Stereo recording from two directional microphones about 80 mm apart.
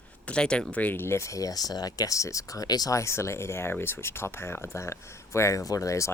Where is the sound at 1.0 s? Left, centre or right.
Left.